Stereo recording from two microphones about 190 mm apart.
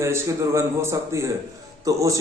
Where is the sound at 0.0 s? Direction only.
15° right (ahead or behind).